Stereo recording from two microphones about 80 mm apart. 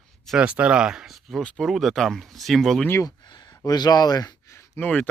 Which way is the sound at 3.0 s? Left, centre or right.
Left.